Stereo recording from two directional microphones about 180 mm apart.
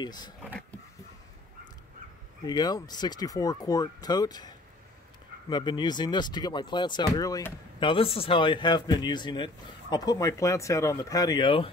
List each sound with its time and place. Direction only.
0.0 s speech: 25° left (ahead or behind)
2.4 s speech: 20° left (ahead or behind)